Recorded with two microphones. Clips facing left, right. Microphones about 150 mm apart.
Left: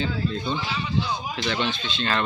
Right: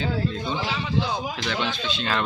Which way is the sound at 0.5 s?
90° right.